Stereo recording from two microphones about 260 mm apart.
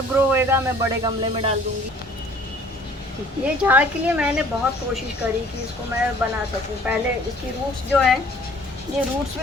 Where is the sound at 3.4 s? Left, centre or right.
Centre.